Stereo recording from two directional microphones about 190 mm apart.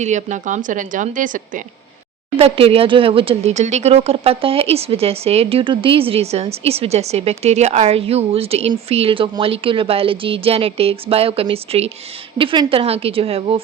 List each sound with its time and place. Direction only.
0.0 s a woman's voice: 40° right (ahead or behind)
2.3 s a woman's voice: 30° right (ahead or behind)